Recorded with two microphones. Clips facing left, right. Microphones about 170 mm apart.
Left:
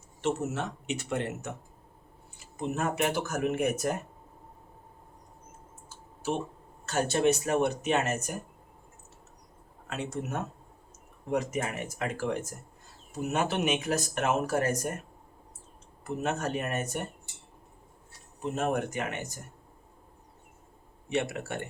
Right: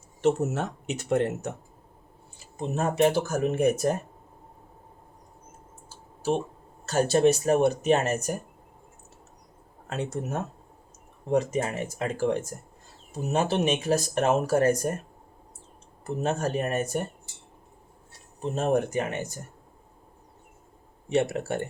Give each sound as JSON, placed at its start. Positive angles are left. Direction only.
{"t": 0.2, "sound": "speech", "side_deg": -40}
{"t": 2.6, "sound": "speech", "side_deg": -30}
{"t": 6.8, "sound": "speech", "side_deg": -35}
{"t": 9.8, "sound": "speech", "side_deg": -35}
{"t": 16.0, "sound": "speech", "side_deg": -30}
{"t": 18.4, "sound": "speech", "side_deg": -30}
{"t": 21.1, "sound": "speech", "side_deg": -35}